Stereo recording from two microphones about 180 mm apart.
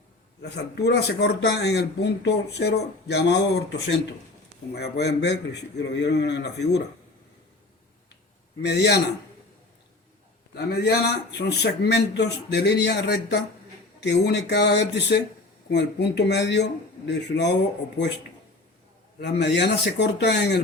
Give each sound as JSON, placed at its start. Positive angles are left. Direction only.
{"t": 0.4, "sound": "speech", "side_deg": 65}
{"t": 8.6, "sound": "speech", "side_deg": 70}
{"t": 10.5, "sound": "speech", "side_deg": 65}
{"t": 19.2, "sound": "speech", "side_deg": 70}